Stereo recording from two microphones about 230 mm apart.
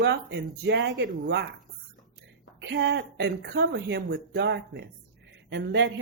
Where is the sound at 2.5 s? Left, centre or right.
Right.